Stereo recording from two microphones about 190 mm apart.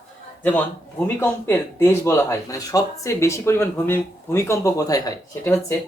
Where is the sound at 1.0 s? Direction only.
10° left (ahead or behind).